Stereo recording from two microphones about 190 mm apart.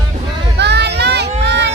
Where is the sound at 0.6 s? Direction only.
60° right (ahead or behind).